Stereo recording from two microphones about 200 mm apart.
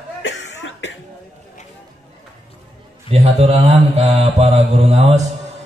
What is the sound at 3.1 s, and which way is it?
A man's voice, 30° right (ahead or behind).